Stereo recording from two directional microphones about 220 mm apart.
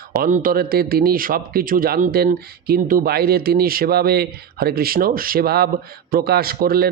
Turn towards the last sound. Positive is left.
turn(degrees=-45)  # may be behind; listen again after turning